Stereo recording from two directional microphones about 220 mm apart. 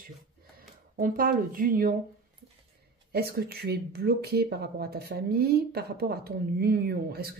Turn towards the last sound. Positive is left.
turn(degrees=-45)  # may be behind; listen again after turning